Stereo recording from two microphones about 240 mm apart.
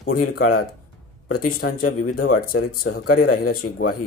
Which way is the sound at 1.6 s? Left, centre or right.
Left.